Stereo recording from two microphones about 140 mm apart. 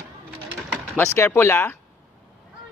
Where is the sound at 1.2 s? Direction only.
15° left (ahead or behind).